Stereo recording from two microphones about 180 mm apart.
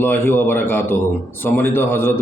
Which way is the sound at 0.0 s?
10° left (ahead or behind).